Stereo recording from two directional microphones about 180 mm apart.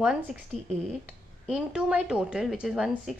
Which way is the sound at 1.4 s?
Centre (ahead or behind).